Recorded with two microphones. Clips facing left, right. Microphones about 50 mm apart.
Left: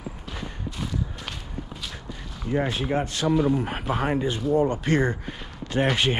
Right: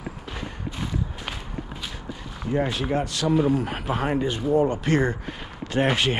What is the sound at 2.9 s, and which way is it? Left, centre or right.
Speech, left.